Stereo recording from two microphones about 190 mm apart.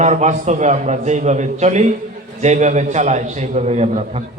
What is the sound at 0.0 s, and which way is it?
A man's voice, 40° right (ahead or behind).